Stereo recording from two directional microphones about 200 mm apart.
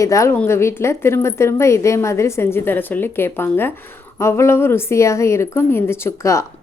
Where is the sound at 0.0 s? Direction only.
15° left (ahead or behind).